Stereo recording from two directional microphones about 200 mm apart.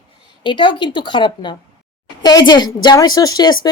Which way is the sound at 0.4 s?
25° left (ahead or behind).